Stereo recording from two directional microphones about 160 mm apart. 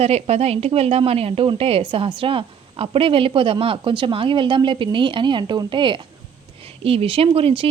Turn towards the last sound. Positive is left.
turn(degrees=-35)  # may be behind; listen again after turning